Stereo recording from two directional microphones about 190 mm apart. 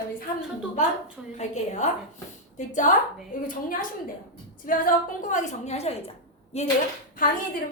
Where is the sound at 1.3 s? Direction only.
35° left (ahead or behind).